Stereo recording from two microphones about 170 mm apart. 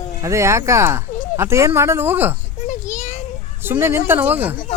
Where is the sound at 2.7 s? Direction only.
45° left (ahead or behind).